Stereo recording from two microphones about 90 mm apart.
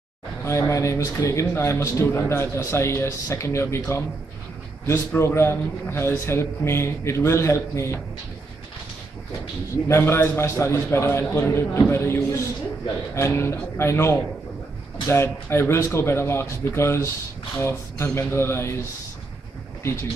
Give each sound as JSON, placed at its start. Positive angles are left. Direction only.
{"t": 0.5, "sound": "a man's voice", "side_deg": 35}
{"t": 4.8, "sound": "a man's voice", "side_deg": 30}
{"t": 9.8, "sound": "a man's voice", "side_deg": 30}
{"t": 19.8, "sound": "speech", "side_deg": 30}